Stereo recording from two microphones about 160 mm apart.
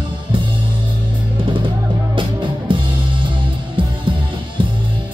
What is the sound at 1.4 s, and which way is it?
Music, 30° right (ahead or behind).